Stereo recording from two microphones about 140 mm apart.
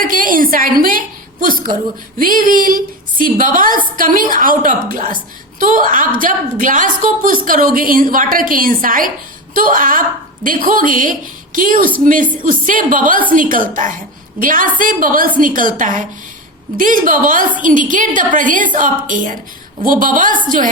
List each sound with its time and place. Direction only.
0.0 s a woman's voice: 80° right